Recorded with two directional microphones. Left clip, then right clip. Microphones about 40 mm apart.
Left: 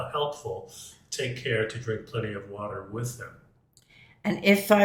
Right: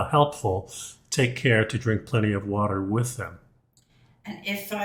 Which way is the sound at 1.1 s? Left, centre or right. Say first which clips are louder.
Right 6 dB; right.